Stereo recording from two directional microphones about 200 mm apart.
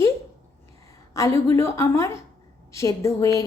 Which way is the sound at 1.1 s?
15° left (ahead or behind).